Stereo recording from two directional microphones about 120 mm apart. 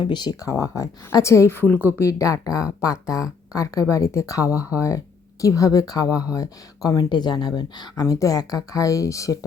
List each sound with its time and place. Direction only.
0.0 s speech: 40° left (ahead or behind)